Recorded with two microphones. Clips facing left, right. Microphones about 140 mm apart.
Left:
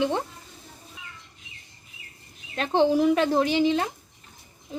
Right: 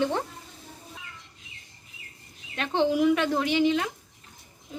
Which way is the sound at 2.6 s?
35° left (ahead or behind).